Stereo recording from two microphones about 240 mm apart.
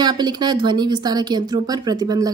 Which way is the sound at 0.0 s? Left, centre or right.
Centre.